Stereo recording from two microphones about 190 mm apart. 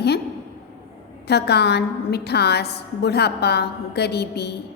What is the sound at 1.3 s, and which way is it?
A woman's voice, 60° left (ahead or behind).